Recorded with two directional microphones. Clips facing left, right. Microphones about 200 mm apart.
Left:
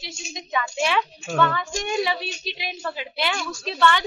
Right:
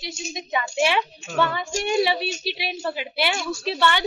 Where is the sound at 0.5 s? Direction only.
20° right (ahead or behind).